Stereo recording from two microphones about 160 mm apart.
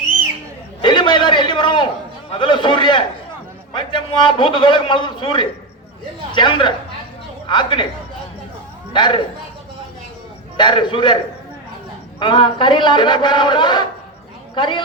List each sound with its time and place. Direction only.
0.8 s a sound: 30° left (ahead or behind)
2.4 s a man's voice: 30° left (ahead or behind)
8.9 s a man's voice: 30° left (ahead or behind)
10.6 s a man's voice: 30° left (ahead or behind)
12.2 s a man's voice: 30° left (ahead or behind)